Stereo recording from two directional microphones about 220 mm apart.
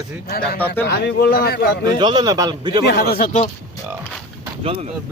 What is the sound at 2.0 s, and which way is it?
Speech, 20° right (ahead or behind).